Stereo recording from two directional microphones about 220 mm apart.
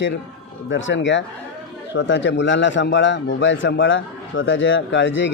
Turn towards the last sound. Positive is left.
turn(degrees=55)  # may be behind; listen again after turning